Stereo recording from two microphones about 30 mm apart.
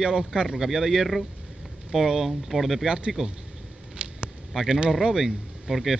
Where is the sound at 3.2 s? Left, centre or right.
Right.